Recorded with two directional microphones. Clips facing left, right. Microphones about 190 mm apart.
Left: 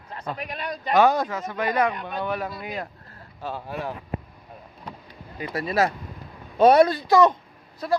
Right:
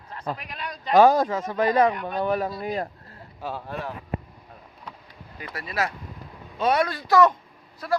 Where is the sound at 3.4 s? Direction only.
5° right (ahead or behind).